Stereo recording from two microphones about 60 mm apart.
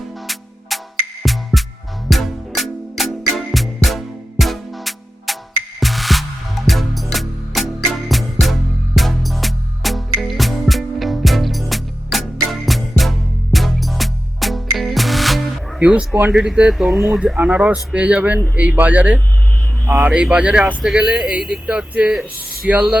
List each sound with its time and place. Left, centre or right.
0.7 s music: centre
16.3 s speech: centre
16.7 s speech: centre
17.3 s speech: right
20.3 s speech: centre